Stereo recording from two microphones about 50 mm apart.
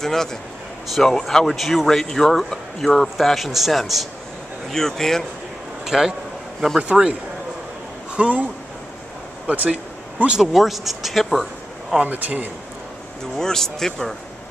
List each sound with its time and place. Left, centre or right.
0.0 s speech: centre
4.6 s speech: centre
5.9 s a man's voice: centre
8.2 s speech: right
9.5 s speech: right
10.3 s speech: centre
12.0 s speech: right
13.4 s speech: centre